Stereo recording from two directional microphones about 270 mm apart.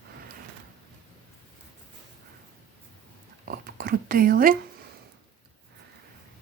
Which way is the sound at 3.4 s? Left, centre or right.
Right.